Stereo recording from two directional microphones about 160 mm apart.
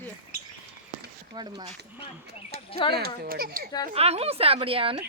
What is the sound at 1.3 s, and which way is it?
Speech, 25° right (ahead or behind).